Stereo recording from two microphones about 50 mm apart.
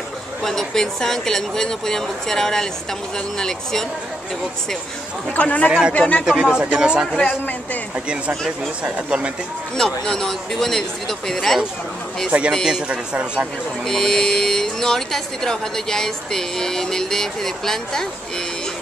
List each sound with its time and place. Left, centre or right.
0.4 s speech: centre
5.3 s a man's voice: left
5.7 s speech: centre
5.9 s speech: left
6.2 s speech: centre
7.2 s a man's voice: left
8.8 s speech: right
9.8 s speech: centre
12.3 s speech: right
12.8 s speech: right
13.8 s speech: centre